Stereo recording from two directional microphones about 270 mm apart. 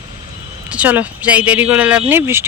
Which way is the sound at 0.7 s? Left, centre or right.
Centre.